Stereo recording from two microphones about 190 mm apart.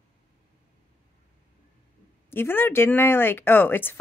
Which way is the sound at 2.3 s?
10° left (ahead or behind).